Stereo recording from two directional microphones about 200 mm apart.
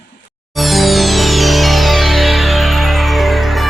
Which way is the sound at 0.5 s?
Centre (ahead or behind).